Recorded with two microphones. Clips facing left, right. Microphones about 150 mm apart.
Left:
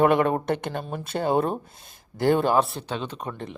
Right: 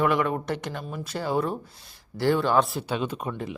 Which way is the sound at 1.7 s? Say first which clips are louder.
Right 4 dB; 20° left (ahead or behind).